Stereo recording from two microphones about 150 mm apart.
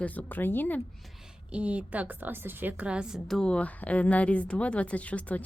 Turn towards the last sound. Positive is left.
turn(degrees=10)  # may be behind; listen again after turning